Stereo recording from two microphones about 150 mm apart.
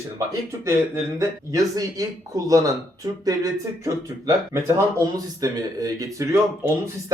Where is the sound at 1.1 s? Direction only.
20° right (ahead or behind).